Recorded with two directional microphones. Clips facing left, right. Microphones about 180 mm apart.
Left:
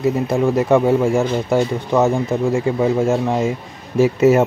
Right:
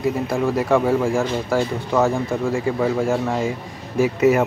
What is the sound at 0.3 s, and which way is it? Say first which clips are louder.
Speech: left 4 dB; 20° left (ahead or behind).